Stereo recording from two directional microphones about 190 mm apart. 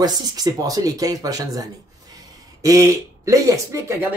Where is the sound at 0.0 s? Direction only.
20° right (ahead or behind).